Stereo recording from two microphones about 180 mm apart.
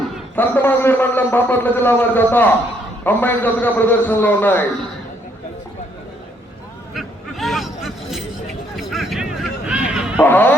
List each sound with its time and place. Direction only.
0.3 s a man's voice: 10° left (ahead or behind)
6.9 s a sound: centre (ahead or behind)
10.2 s a man's voice: 10° left (ahead or behind)